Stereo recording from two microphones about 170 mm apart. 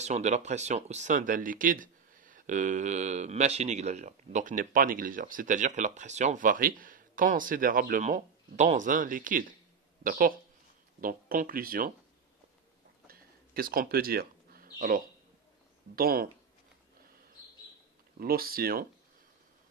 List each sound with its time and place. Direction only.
0.0 s speech: 40° right (ahead or behind)
13.0 s a sound: 60° right (ahead or behind)
16.0 s speech: 60° right (ahead or behind)
18.2 s speech: 60° right (ahead or behind)